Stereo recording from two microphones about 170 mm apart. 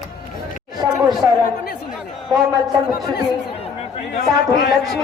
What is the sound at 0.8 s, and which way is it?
Speech, 25° right (ahead or behind).